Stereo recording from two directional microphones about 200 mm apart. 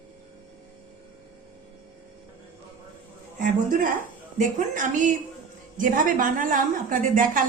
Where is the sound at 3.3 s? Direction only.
40° right (ahead or behind).